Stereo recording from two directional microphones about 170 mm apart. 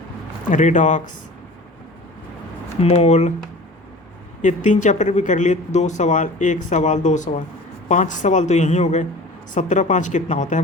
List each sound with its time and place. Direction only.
0.5 s speech: 45° left (ahead or behind)
2.8 s speech: 40° left (ahead or behind)
4.4 s speech: 45° left (ahead or behind)